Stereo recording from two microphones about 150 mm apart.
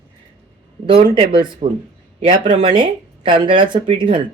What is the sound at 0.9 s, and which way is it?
Speech, 35° right (ahead or behind).